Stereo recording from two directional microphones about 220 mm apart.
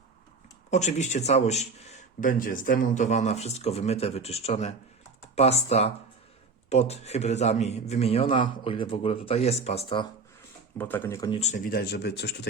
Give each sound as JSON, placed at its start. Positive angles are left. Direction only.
{"t": 0.7, "sound": "a man's voice", "side_deg": 30}
{"t": 10.8, "sound": "speech", "side_deg": 10}
{"t": 11.3, "sound": "speech", "side_deg": 30}